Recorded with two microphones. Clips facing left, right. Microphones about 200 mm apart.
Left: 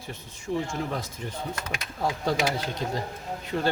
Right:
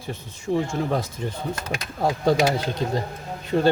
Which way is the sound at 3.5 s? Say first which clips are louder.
Right 7 dB; 35° right (ahead or behind).